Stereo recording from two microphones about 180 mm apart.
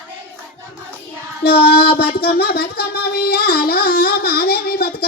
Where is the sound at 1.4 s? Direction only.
60° left (ahead or behind).